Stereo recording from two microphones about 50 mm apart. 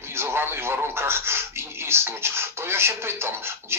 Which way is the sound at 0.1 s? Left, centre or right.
Right.